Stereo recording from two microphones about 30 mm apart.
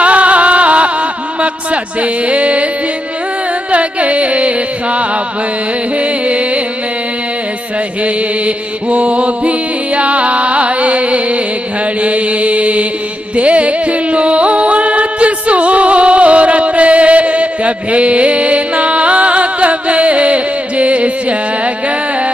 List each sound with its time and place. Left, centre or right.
0.0 s a sound: right
1.4 s mantra: right
3.7 s carnatic music: right
5.9 s mantra: right
8.0 s mantra: right
13.4 s music: right